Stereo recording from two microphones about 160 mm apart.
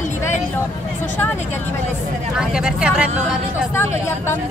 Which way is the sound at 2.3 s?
5° right (ahead or behind).